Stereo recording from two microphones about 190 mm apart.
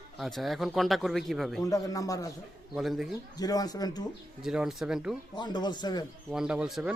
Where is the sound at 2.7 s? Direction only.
Centre (ahead or behind).